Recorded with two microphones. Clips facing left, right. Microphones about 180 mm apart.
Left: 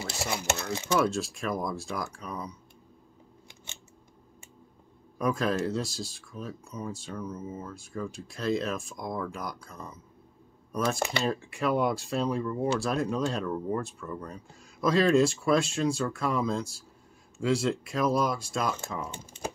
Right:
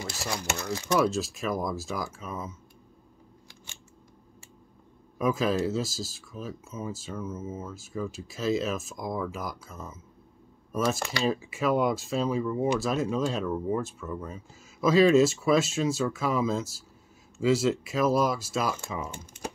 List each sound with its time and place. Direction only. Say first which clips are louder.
0.0 s speech: left 1 dB; 25° left (ahead or behind)
0.9 s speech: right 2 dB; centre (ahead or behind)
5.2 s speech: right 2 dB; centre (ahead or behind)
11.2 s speech: right 5 dB; 5° right (ahead or behind)